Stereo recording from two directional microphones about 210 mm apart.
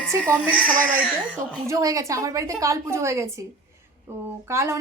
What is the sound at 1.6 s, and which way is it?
A woman's voice, 15° right (ahead or behind).